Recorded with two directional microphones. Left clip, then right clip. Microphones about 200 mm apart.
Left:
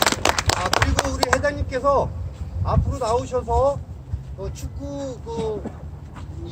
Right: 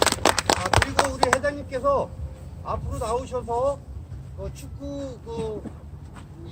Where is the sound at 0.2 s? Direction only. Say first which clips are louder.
Right 1 dB; 45° left (ahead or behind).